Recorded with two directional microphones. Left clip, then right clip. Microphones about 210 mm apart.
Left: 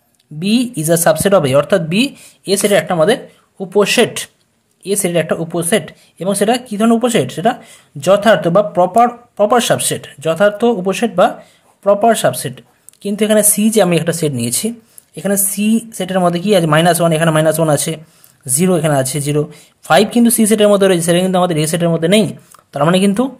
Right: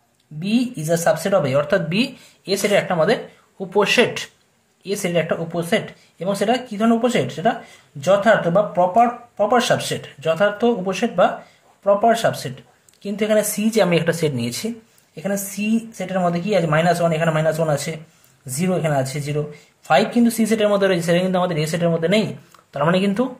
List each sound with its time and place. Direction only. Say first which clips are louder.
0.4 s a woman's voice: left 6 dB; 50° left (ahead or behind)